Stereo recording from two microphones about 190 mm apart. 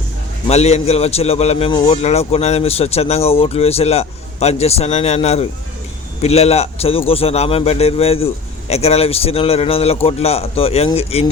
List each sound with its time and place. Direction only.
0.4 s a man's voice: 35° left (ahead or behind)